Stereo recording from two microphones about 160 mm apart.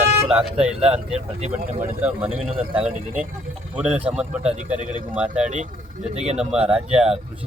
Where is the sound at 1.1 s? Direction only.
45° right (ahead or behind).